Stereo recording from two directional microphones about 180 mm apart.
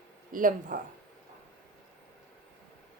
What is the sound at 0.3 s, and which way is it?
Speech, 50° right (ahead or behind).